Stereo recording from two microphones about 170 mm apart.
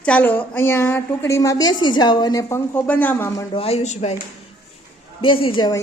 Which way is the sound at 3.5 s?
35° left (ahead or behind).